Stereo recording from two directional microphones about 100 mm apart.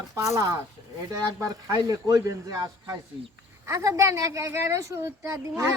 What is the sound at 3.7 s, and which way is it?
A woman's voice, 30° right (ahead or behind).